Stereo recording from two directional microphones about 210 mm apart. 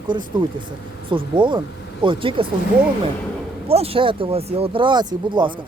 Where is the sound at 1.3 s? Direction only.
20° right (ahead or behind).